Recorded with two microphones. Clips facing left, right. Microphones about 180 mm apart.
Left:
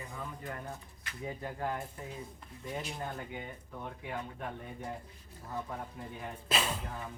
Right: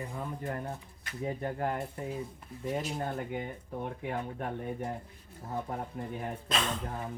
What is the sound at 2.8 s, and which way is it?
Speech, 45° right (ahead or behind).